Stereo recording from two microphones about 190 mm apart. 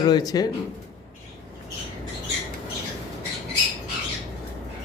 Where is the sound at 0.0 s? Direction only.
20° left (ahead or behind).